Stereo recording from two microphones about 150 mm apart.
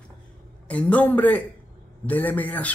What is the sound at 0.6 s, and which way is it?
A man's voice, 10° left (ahead or behind).